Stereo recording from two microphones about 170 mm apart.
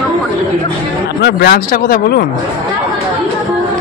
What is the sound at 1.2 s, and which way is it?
Speech, 65° left (ahead or behind).